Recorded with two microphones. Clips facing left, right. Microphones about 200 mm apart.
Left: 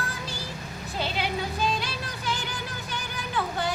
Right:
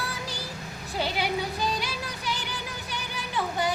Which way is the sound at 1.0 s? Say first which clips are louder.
Right 1 dB; 10° right (ahead or behind).